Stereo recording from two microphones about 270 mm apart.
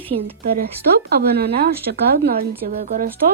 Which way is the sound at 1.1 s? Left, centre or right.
Right.